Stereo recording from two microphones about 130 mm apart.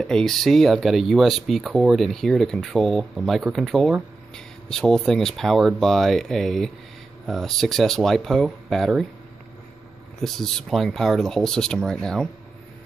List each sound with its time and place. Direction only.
0.0 s speech: 5° left (ahead or behind)
10.2 s speech: centre (ahead or behind)